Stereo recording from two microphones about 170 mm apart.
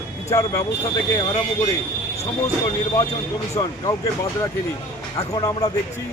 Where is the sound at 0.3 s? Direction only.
20° left (ahead or behind).